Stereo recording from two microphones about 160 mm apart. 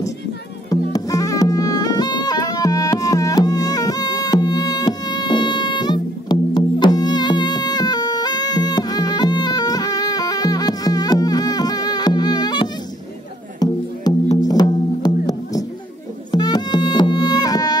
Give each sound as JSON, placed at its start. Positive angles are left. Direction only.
{"t": 0.7, "sound": "music", "side_deg": 20}